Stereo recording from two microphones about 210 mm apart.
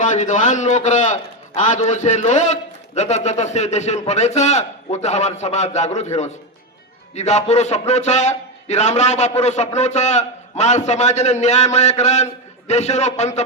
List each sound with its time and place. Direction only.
0.0 s a man's voice: 35° left (ahead or behind)